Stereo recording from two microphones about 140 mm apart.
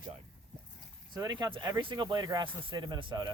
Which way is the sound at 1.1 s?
30° right (ahead or behind).